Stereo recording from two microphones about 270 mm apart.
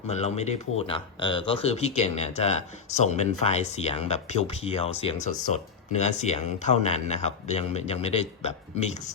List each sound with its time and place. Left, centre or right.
0.1 s speech: left